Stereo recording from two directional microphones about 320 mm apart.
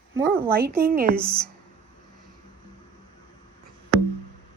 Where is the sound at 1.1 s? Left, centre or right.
Centre.